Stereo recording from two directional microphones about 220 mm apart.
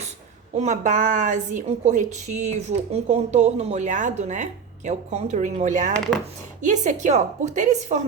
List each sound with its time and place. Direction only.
0.5 s a woman's voice: 30° right (ahead or behind)